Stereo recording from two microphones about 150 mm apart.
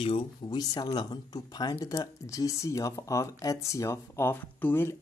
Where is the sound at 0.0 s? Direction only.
35° left (ahead or behind).